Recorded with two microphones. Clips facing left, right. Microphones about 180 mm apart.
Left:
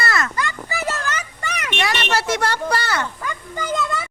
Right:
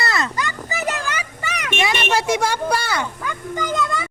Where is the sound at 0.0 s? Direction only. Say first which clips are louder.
Even; 20° right (ahead or behind).